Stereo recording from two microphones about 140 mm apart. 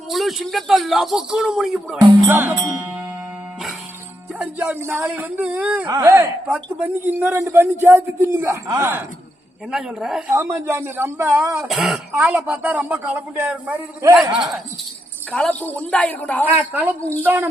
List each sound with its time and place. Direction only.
0.1 s a man's voice: centre (ahead or behind)
2.0 s speech: 30° right (ahead or behind)
2.3 s a man's voice: 15° right (ahead or behind)
4.4 s a man's voice: 15° right (ahead or behind)
5.9 s a man's voice: 20° right (ahead or behind)
9.7 s a man's voice: 5° right (ahead or behind)
10.3 s a man's voice: 20° right (ahead or behind)
11.7 s a man's voice: 5° right (ahead or behind)
14.3 s a man's voice: centre (ahead or behind)
16.6 s a man's voice: 15° right (ahead or behind)